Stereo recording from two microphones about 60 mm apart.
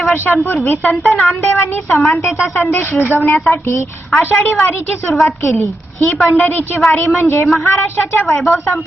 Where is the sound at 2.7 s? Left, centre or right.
Left.